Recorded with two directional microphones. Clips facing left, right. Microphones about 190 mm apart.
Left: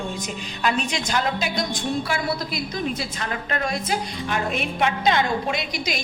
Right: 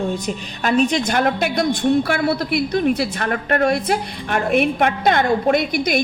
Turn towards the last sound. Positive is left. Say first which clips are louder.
# right 9 dB
turn(degrees=-55)  # may be behind; listen again after turning